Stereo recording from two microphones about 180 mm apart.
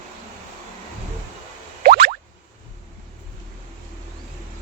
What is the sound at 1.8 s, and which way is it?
Boing, 55° right (ahead or behind).